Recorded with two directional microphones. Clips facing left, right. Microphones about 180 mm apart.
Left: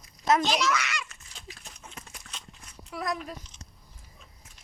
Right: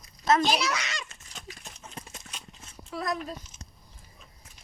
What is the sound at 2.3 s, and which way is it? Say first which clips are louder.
Horse: right 1 dB; 20° right (ahead or behind).